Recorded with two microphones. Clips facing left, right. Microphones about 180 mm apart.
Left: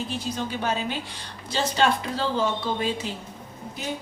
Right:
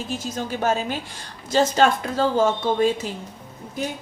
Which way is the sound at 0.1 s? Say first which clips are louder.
Right 2 dB; 45° right (ahead or behind).